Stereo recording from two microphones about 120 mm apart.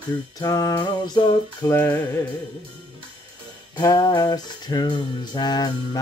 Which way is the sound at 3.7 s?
30° left (ahead or behind).